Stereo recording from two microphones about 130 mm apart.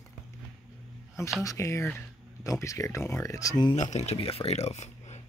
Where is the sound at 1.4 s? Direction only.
25° left (ahead or behind).